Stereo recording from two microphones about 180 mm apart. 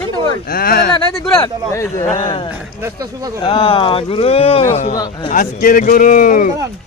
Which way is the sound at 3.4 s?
25° left (ahead or behind).